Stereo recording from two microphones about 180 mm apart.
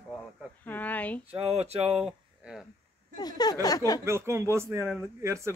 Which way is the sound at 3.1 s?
20° left (ahead or behind).